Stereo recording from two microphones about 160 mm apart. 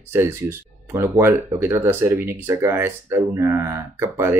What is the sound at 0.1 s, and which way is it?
Speech, 15° right (ahead or behind).